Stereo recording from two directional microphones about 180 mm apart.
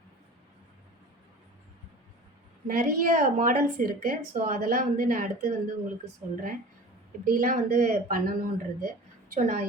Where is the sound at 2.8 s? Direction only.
50° right (ahead or behind).